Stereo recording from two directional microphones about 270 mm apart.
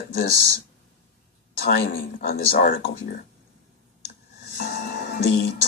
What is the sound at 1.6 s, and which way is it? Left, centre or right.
Speech, left.